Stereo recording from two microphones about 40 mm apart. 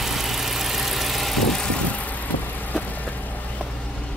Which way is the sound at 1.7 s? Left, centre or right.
Left.